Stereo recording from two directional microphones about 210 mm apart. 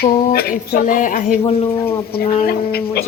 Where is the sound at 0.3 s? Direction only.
45° left (ahead or behind).